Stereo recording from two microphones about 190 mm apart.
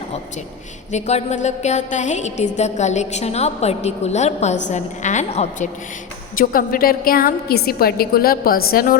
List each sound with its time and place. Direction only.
0.9 s a woman's voice: 35° left (ahead or behind)